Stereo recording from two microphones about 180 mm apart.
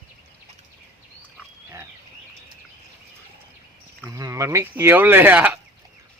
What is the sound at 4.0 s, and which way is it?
Speech, 20° right (ahead or behind).